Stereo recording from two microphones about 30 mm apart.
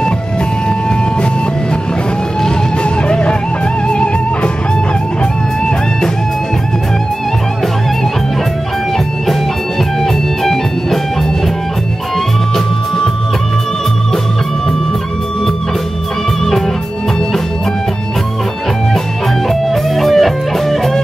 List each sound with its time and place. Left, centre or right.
2.8 s music: left
10.0 s music: centre
12.5 s music: centre
19.5 s music: centre